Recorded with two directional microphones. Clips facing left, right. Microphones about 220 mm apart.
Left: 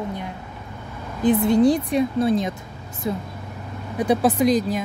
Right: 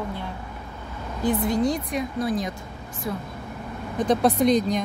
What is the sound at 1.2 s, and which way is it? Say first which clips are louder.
Speech: left 6 dB; 25° left (ahead or behind).